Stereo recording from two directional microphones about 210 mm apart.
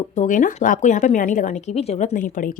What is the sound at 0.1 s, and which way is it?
A woman's voice, 35° left (ahead or behind).